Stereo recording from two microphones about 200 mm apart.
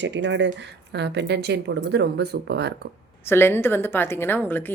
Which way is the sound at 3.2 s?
10° left (ahead or behind).